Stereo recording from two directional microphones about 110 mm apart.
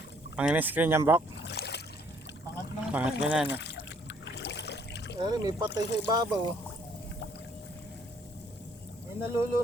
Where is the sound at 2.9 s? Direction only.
10° right (ahead or behind).